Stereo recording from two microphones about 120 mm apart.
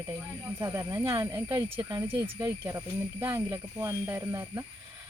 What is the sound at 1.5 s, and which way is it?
Speech, 40° right (ahead or behind).